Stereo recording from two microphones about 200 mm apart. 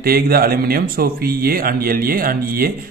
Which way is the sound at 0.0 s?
50° right (ahead or behind).